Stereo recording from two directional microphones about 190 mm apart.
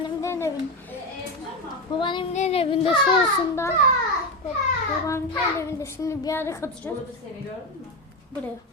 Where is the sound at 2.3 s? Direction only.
35° left (ahead or behind).